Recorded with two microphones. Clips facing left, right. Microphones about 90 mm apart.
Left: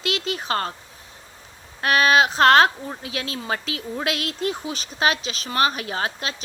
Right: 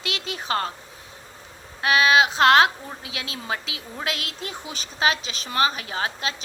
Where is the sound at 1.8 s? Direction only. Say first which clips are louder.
Left 1 dB; 45° left (ahead or behind).